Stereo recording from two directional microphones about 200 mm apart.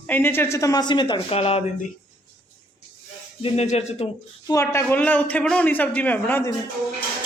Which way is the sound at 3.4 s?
30° left (ahead or behind).